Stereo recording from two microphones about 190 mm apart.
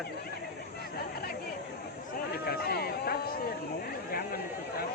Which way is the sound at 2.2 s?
50° left (ahead or behind).